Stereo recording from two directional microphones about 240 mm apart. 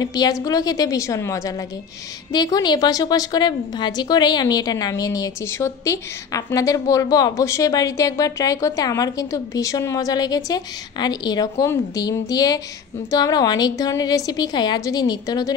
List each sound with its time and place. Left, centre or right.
0.0 s a woman's voice: centre